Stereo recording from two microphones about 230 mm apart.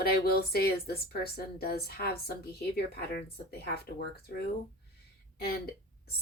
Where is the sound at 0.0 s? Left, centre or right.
Left.